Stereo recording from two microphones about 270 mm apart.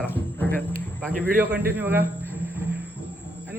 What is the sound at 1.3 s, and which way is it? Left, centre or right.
Speech, centre.